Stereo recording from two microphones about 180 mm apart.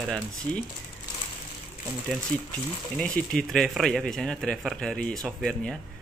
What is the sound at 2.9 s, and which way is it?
Speech, 5° left (ahead or behind).